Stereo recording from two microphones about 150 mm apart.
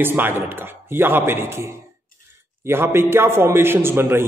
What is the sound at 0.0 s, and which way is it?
A man's voice, 15° right (ahead or behind).